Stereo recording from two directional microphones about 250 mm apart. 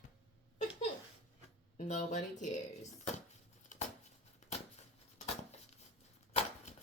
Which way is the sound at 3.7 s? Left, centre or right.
Left.